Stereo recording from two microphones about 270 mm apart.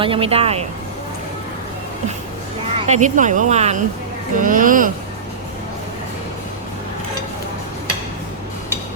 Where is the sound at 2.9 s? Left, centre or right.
Right.